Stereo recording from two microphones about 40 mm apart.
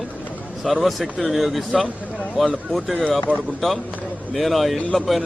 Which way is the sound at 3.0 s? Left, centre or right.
Left.